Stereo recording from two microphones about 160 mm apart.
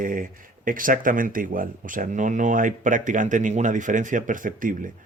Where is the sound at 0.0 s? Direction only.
60° right (ahead or behind).